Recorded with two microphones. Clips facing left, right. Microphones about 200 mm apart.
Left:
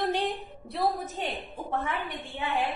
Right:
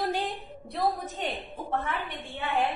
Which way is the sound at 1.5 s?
15° left (ahead or behind).